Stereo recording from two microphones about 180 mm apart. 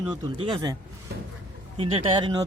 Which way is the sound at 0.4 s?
25° right (ahead or behind).